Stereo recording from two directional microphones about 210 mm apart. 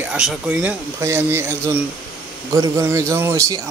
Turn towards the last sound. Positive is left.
turn(degrees=-15)  # may be behind; listen again after turning